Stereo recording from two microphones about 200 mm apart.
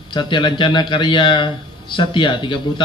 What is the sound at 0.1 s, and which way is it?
A man's voice, 25° left (ahead or behind).